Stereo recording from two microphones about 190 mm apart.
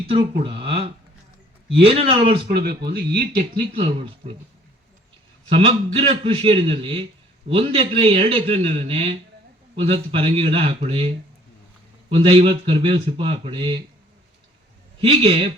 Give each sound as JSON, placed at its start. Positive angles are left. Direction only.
{"t": 0.0, "sound": "speech", "side_deg": -30}
{"t": 2.5, "sound": "speech", "side_deg": -55}
{"t": 3.7, "sound": "speech", "side_deg": -30}
{"t": 5.5, "sound": "speech", "side_deg": -30}
{"t": 15.0, "sound": "speech", "side_deg": -30}